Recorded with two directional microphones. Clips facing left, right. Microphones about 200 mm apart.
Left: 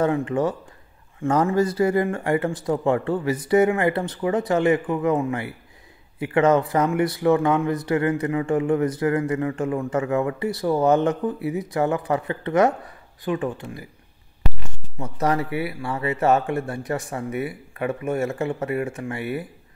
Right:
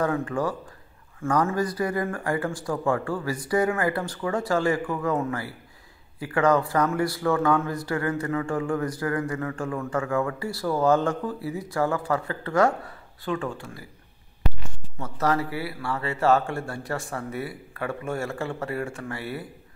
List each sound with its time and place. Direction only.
0.0 s speech: 20° left (ahead or behind)
15.0 s speech: 20° left (ahead or behind)